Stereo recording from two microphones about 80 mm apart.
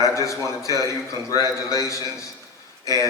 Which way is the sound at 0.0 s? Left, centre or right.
Left.